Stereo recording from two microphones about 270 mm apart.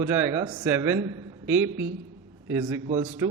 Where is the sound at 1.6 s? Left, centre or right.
Right.